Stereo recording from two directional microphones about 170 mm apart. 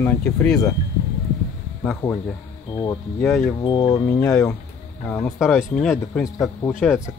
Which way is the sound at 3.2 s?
Centre (ahead or behind).